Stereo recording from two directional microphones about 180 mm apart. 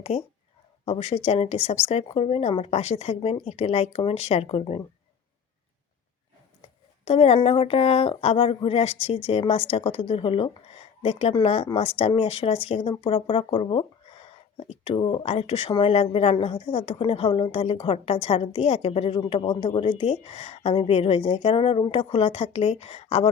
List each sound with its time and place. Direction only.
0.1 s speech: 35° left (ahead or behind)
7.0 s speech: 35° left (ahead or behind)